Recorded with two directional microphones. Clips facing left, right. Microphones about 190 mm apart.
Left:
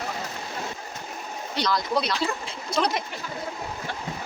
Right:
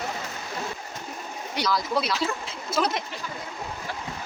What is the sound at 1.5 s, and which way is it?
Speech, 5° right (ahead or behind).